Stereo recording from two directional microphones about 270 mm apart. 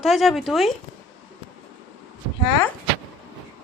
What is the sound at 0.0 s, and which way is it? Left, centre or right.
Speech, centre.